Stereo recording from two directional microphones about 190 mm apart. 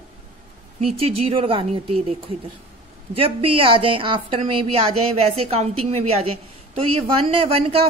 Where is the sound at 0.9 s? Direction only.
30° right (ahead or behind).